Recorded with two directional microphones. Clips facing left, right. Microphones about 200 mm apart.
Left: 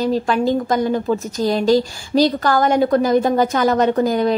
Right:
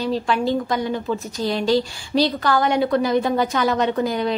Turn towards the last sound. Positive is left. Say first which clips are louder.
# left 5 dB
turn(degrees=45)  # may be behind; listen again after turning